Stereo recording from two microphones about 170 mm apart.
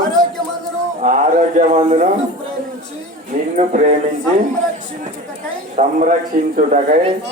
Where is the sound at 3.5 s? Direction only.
45° right (ahead or behind).